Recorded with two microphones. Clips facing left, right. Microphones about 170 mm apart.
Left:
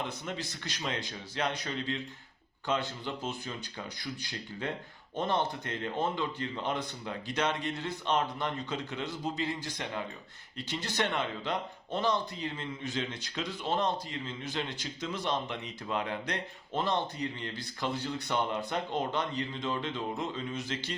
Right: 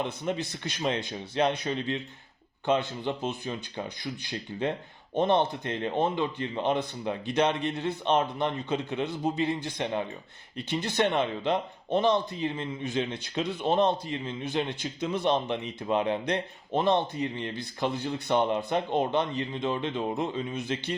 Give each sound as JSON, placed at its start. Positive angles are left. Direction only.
{"t": 0.0, "sound": "speech", "side_deg": -20}
{"t": 3.0, "sound": "speech", "side_deg": -20}